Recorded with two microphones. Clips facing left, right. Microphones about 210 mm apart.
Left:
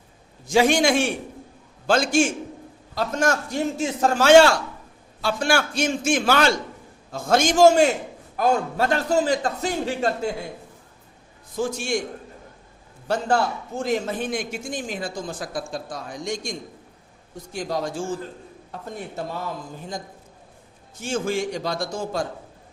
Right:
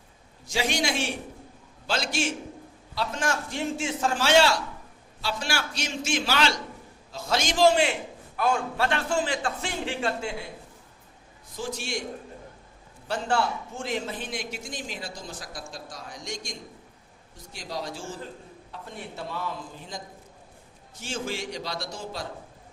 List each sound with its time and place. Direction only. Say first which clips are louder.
0.4 s a man's voice: left 10 dB; 50° left (ahead or behind)
11.5 s a man's voice: left 8 dB; 50° left (ahead or behind)
13.1 s a man's voice: left 4 dB; 40° left (ahead or behind)
21.0 s a man's voice: left 8 dB; 50° left (ahead or behind)